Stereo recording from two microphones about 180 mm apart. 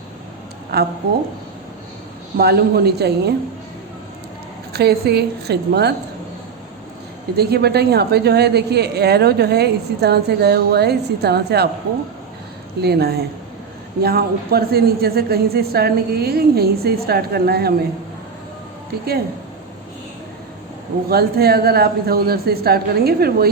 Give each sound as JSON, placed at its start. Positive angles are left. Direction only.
{"t": 0.7, "sound": "a woman's voice", "side_deg": -65}
{"t": 2.4, "sound": "a woman's voice", "side_deg": -60}
{"t": 4.7, "sound": "a woman's voice", "side_deg": -60}
{"t": 7.3, "sound": "a woman's voice", "side_deg": -65}
{"t": 12.8, "sound": "a woman's voice", "side_deg": -60}
{"t": 21.1, "sound": "a woman's voice", "side_deg": -60}